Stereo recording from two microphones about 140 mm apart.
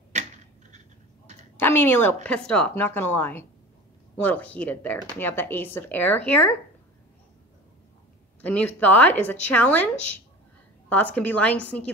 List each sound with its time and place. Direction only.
0.1 s a sound: 55° right (ahead or behind)
1.6 s a woman's voice: 15° left (ahead or behind)
8.4 s a woman's voice: 10° left (ahead or behind)